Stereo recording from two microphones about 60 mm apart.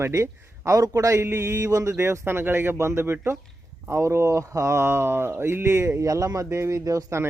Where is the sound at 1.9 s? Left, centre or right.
Right.